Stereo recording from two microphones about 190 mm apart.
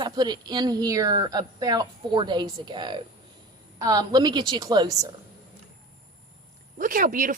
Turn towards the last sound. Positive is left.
turn(degrees=-45)  # may be behind; listen again after turning